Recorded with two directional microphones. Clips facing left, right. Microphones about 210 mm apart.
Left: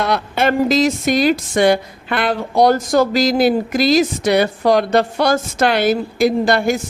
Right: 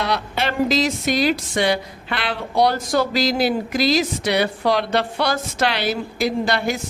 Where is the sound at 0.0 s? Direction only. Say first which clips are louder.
Left 6 dB; 50° left (ahead or behind).